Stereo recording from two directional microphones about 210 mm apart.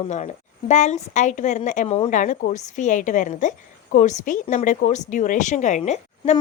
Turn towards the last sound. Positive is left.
turn(degrees=35)  # may be behind; listen again after turning